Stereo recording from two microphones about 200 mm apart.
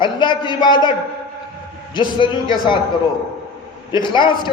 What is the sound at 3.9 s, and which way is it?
Speech, 25° left (ahead or behind).